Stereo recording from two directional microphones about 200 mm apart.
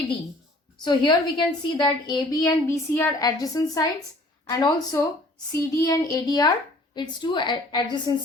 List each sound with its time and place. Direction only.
0.9 s a woman's voice: 25° left (ahead or behind)